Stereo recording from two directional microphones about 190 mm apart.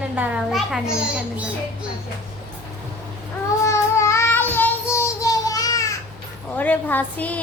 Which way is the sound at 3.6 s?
15° left (ahead or behind).